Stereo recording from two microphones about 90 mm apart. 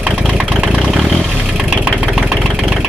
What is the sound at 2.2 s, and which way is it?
Engine, 10° right (ahead or behind).